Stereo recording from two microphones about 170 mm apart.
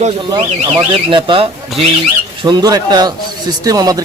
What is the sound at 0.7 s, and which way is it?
Speech, 30° right (ahead or behind).